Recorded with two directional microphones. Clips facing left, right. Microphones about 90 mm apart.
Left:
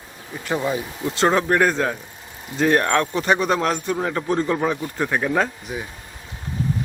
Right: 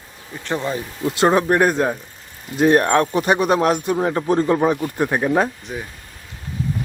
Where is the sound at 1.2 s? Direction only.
15° right (ahead or behind).